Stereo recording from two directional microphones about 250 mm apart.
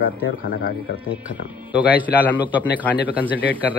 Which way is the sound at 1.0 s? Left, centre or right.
Centre.